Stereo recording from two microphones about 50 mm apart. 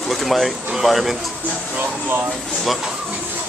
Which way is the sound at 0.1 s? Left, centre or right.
Centre.